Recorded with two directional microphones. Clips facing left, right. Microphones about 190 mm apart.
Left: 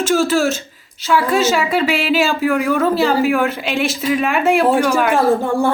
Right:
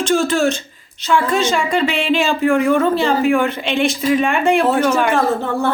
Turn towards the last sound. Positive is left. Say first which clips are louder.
# left 3 dB
turn(degrees=10)  # may be behind; listen again after turning